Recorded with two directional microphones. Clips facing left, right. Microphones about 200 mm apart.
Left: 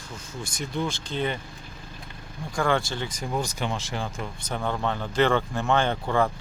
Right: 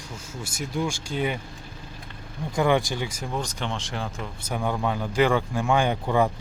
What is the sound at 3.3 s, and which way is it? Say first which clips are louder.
Speech: left 3 dB; 10° left (ahead or behind).